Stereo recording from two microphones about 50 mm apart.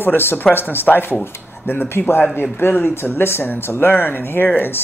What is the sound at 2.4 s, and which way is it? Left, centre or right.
Speech, left.